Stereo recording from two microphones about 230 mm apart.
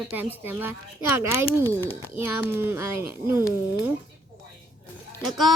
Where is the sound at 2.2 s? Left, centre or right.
Centre.